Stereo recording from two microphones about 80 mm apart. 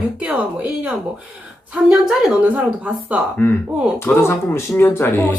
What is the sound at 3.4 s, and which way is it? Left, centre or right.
Speech, left.